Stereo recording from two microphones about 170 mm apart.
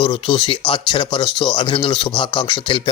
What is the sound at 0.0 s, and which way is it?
Speech, 30° left (ahead or behind).